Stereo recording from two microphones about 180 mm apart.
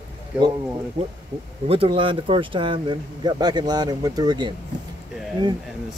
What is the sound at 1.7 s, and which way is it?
Speech, 30° right (ahead or behind).